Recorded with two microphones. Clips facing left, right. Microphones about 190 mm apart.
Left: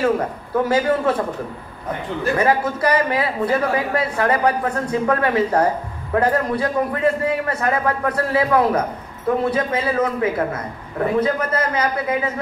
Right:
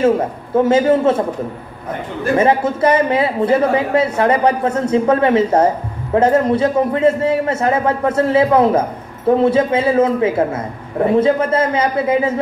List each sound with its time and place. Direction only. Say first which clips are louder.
0.0 s a man's voice: right 5 dB; 25° right (ahead or behind)
2.3 s a man's voice: right 6 dB; 25° right (ahead or behind)